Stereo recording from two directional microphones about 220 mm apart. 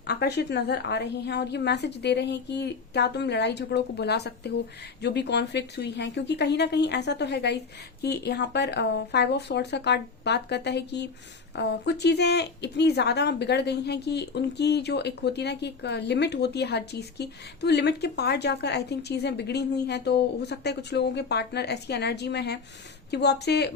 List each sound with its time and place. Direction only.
0.0 s speech: 50° left (ahead or behind)